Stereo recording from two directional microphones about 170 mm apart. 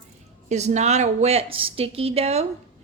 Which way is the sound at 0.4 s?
40° right (ahead or behind).